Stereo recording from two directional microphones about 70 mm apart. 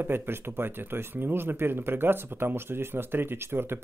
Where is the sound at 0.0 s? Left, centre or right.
Right.